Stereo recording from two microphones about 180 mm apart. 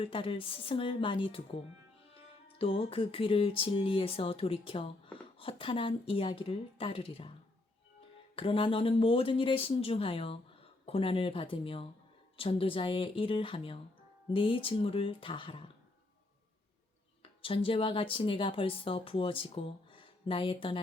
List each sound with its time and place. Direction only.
0.0 s speech: 30° left (ahead or behind)
8.4 s speech: 30° left (ahead or behind)
17.4 s speech: 30° left (ahead or behind)